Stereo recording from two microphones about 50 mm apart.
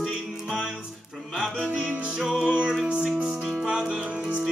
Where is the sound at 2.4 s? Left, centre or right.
Centre.